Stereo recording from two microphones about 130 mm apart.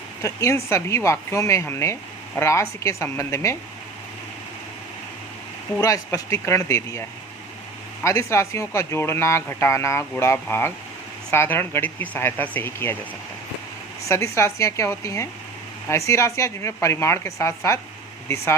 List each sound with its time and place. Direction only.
0.2 s speech: 25° left (ahead or behind)
5.8 s speech: 25° left (ahead or behind)
8.0 s speech: 25° left (ahead or behind)
14.1 s speech: 20° left (ahead or behind)